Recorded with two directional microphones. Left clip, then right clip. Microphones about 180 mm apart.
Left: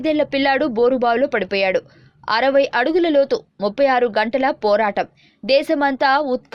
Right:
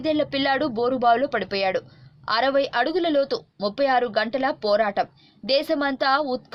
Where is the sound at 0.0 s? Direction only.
25° left (ahead or behind).